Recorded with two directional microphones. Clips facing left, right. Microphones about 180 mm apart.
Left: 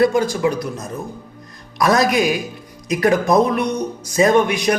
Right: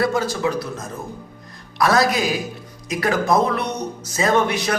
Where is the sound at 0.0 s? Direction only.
15° left (ahead or behind).